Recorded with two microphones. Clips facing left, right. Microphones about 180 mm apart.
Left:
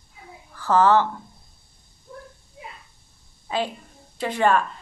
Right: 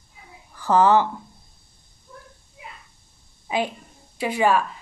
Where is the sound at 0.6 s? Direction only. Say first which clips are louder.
Right 1 dB; 15° right (ahead or behind).